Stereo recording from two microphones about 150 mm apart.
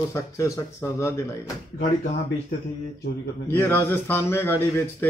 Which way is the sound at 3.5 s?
15° left (ahead or behind).